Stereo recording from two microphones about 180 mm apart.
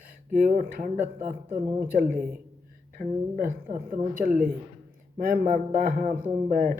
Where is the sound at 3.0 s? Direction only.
45° right (ahead or behind).